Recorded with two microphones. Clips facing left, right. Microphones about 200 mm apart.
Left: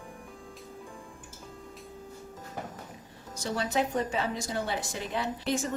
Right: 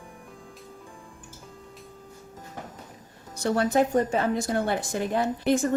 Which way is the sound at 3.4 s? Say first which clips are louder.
Right 7 dB; 55° right (ahead or behind).